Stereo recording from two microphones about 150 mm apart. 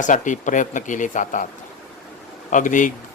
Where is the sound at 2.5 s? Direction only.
60° left (ahead or behind).